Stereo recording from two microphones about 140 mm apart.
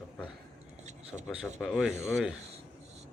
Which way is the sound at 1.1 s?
10° left (ahead or behind).